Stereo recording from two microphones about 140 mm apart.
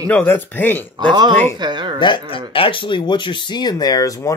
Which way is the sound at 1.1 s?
35° right (ahead or behind).